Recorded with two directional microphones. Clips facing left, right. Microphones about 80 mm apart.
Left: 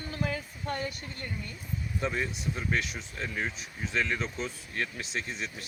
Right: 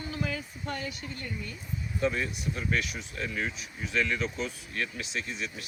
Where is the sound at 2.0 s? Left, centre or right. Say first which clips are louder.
Right 3 dB; left.